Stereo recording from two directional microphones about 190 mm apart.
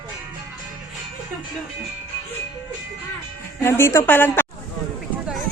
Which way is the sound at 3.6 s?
15° left (ahead or behind).